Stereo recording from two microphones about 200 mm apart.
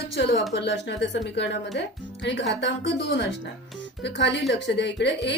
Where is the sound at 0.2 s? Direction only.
60° left (ahead or behind).